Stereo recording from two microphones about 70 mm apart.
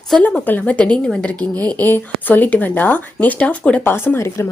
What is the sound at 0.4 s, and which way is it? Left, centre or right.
Speech, left.